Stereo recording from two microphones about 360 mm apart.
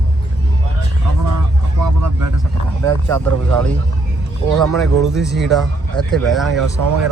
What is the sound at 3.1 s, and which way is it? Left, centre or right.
Speech, centre.